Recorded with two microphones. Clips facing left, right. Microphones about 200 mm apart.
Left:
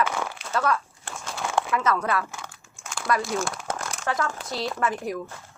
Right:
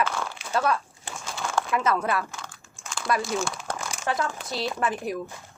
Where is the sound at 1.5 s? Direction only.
20° left (ahead or behind).